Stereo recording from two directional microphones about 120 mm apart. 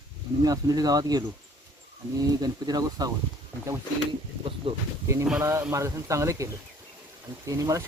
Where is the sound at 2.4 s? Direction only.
30° right (ahead or behind).